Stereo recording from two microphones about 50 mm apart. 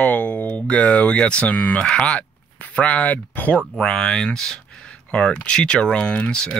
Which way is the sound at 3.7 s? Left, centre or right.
Centre.